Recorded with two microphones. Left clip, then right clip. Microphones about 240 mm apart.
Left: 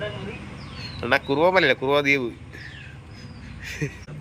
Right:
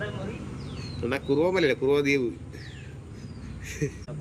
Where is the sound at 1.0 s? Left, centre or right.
Centre.